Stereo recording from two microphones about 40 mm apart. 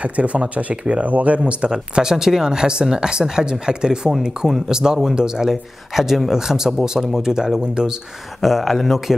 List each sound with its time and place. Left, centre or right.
0.0 s speech: right
1.7 s speech: centre
5.5 s speech: centre
8.4 s speech: centre